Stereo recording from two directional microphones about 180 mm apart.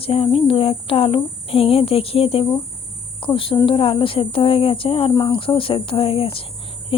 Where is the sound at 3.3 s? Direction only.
30° left (ahead or behind).